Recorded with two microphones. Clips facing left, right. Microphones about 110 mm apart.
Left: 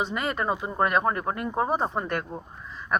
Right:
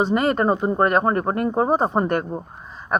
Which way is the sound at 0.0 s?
45° right (ahead or behind).